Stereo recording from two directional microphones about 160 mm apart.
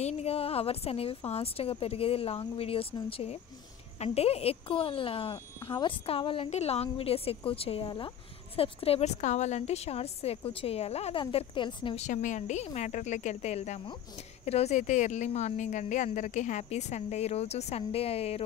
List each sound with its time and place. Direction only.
0.0 s a woman's voice: 40° left (ahead or behind)
12.0 s a woman's voice: 50° left (ahead or behind)